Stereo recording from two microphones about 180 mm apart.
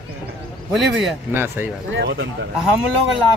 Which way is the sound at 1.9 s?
65° right (ahead or behind).